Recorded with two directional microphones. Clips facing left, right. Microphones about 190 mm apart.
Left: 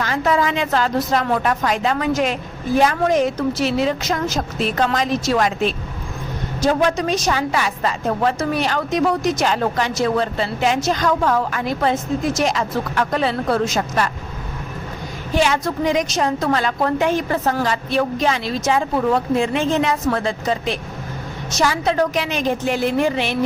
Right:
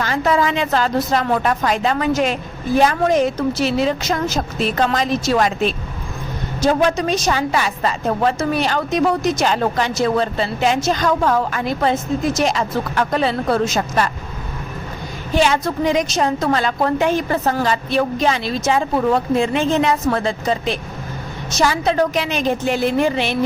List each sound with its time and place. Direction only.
0.0 s a woman's voice: 30° right (ahead or behind)
15.4 s a woman's voice: 25° right (ahead or behind)